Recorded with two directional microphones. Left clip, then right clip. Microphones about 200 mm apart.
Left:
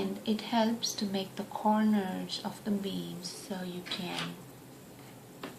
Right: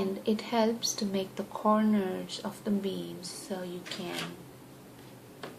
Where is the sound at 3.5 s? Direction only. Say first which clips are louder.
Right 4 dB; 25° right (ahead or behind).